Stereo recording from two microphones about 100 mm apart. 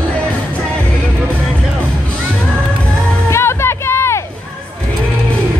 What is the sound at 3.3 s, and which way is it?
Music, 25° left (ahead or behind).